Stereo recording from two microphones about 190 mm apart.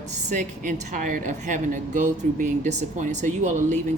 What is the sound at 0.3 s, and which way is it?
A woman's voice, 40° right (ahead or behind).